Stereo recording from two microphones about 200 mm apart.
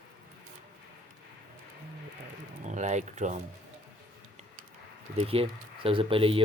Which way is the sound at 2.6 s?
35° right (ahead or behind).